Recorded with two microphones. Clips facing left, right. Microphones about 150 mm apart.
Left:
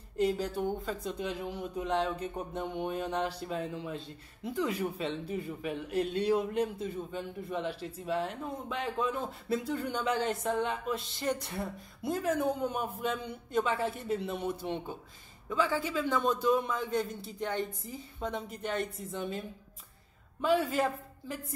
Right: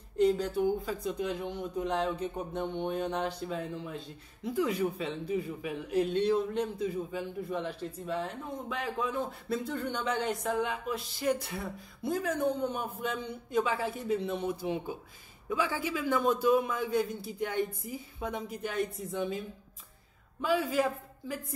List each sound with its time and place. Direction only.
0.2 s a man's voice: centre (ahead or behind)
20.4 s speech: centre (ahead or behind)